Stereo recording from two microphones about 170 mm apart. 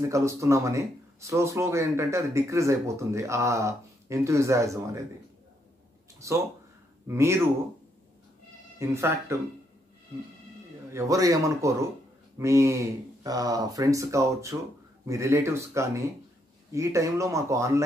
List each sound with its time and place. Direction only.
0.0 s speech: 15° right (ahead or behind)
6.1 s a sound: 15° right (ahead or behind)
7.1 s speech: 15° right (ahead or behind)
8.7 s speech: 15° right (ahead or behind)
10.9 s speech: 15° right (ahead or behind)